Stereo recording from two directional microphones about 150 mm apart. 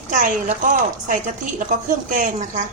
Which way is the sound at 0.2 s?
60° right (ahead or behind).